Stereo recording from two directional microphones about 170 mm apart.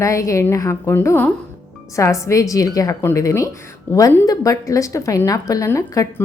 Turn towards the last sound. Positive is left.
turn(degrees=20)  # may be behind; listen again after turning